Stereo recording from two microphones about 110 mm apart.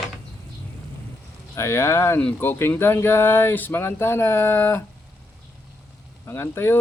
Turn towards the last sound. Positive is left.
turn(degrees=20)  # may be behind; listen again after turning